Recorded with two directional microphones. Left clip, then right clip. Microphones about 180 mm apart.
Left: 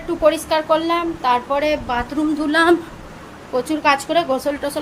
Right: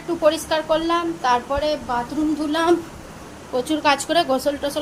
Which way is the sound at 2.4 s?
25° left (ahead or behind).